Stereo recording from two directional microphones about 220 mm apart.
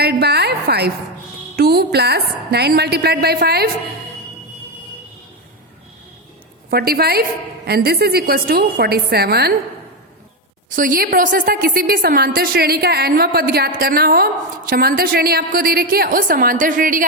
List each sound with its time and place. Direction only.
0.0 s a woman's voice: 45° right (ahead or behind)
6.7 s a woman's voice: 45° right (ahead or behind)
10.7 s a woman's voice: 40° right (ahead or behind)